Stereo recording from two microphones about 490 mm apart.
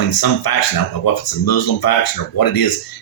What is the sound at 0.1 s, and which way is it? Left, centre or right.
Speech, left.